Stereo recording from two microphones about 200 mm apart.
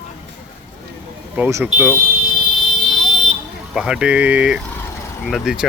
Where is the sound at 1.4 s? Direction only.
10° right (ahead or behind).